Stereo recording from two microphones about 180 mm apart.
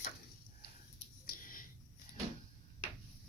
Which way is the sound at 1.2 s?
50° left (ahead or behind).